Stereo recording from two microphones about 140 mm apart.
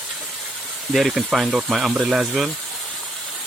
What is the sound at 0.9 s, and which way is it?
Speech, centre (ahead or behind).